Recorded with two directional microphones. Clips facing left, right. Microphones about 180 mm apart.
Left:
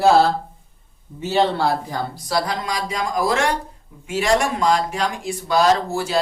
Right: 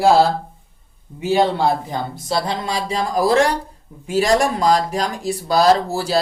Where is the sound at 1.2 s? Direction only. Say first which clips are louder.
Right 2 dB; 10° right (ahead or behind).